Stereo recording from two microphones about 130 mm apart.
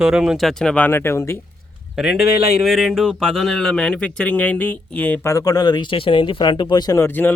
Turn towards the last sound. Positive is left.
turn(degrees=15)  # may be behind; listen again after turning